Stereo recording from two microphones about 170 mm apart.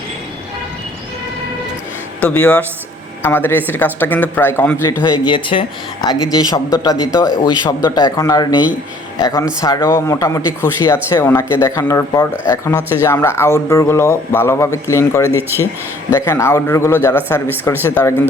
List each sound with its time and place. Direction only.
2.2 s speech: 10° left (ahead or behind)